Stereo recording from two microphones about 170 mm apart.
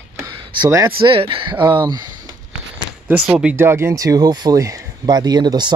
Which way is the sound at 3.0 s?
10° right (ahead or behind).